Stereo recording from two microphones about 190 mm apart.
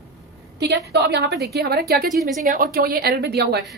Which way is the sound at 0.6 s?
60° right (ahead or behind).